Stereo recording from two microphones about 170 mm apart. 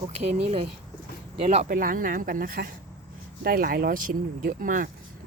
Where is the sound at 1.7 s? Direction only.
55° right (ahead or behind).